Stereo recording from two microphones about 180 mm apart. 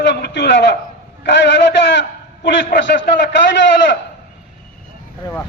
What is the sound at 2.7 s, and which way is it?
Speech, 80° left.